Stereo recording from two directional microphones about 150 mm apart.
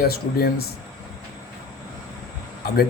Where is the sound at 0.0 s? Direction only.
90° left.